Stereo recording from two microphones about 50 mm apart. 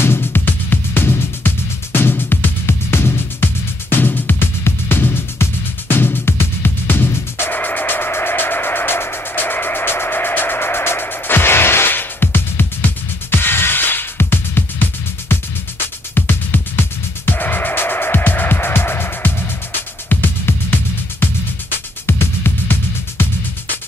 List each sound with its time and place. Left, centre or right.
0.0 s music: left
3.9 s music: left
16.2 s music: left
22.0 s music: left